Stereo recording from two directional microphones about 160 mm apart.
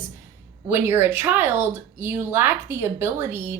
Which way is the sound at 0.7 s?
15° right (ahead or behind).